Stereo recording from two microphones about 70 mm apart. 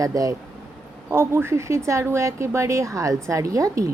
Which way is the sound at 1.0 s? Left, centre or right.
Right.